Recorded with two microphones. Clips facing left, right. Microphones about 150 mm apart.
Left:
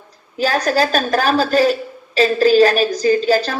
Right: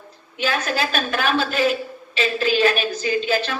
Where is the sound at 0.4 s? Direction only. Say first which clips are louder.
Left 7 dB; 40° left (ahead or behind).